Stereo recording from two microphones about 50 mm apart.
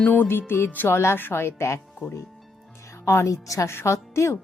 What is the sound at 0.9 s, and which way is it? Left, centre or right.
Speech, left.